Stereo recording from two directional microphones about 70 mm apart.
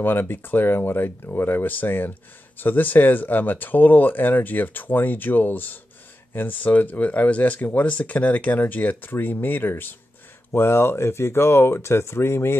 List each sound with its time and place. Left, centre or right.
0.0 s speech: left